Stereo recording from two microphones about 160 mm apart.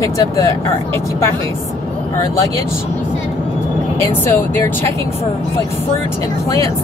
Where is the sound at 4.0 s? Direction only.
15° left (ahead or behind).